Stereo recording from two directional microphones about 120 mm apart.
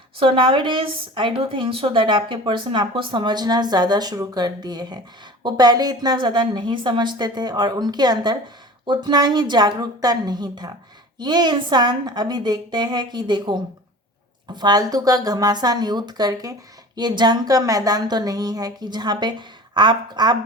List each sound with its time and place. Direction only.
0.2 s a woman's voice: 45° right (ahead or behind)